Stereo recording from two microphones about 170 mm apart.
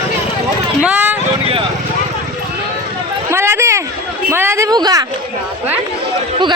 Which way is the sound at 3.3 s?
15° right (ahead or behind).